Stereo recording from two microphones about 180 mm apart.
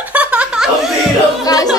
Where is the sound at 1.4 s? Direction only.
20° left (ahead or behind).